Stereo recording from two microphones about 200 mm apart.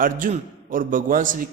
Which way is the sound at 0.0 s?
45° right (ahead or behind).